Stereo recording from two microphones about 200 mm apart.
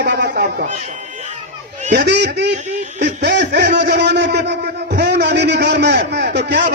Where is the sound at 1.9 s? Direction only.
55° right (ahead or behind).